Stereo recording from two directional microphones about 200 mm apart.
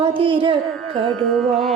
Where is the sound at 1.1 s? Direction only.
5° left (ahead or behind).